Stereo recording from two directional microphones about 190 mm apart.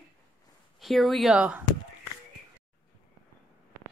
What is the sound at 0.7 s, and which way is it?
Speech, centre (ahead or behind).